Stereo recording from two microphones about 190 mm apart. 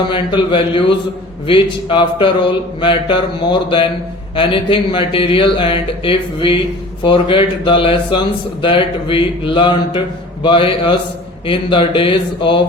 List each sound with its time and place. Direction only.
0.1 s speech: 25° left (ahead or behind)